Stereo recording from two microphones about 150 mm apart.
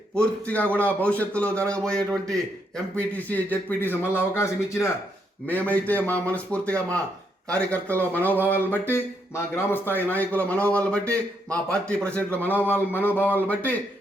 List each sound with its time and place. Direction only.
0.2 s a man's voice: 10° left (ahead or behind)